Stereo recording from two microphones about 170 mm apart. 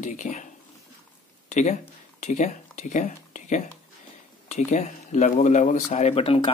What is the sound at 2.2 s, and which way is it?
Speech, 45° left (ahead or behind).